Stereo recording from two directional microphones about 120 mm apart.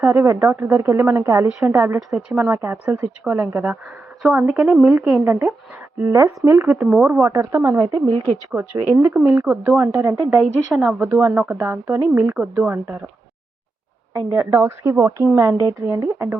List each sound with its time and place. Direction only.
0.0 s speech: 20° right (ahead or behind)
1.5 s speech: 5° right (ahead or behind)
1.7 s speech: 20° right (ahead or behind)
2.1 s speech: 10° right (ahead or behind)
2.5 s speech: 20° right (ahead or behind)
2.8 s speech: 10° right (ahead or behind)
5.2 s speech: 20° right (ahead or behind)
7.9 s speech: 55° right (ahead or behind)
8.5 s speech: 20° right (ahead or behind)
10.7 s speech: 5° right (ahead or behind)
11.0 s speech: 20° right (ahead or behind)
14.3 s speech: 20° right (ahead or behind)